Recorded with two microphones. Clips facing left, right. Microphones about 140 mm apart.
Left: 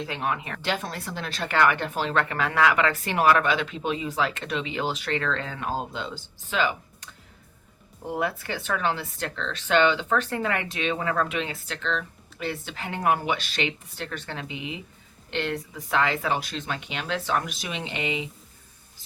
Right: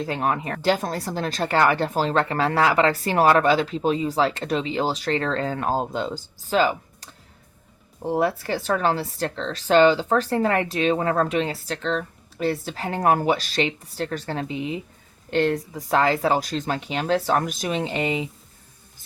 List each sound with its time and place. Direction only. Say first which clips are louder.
0.0 s speech: right 5 dB; 40° right (ahead or behind)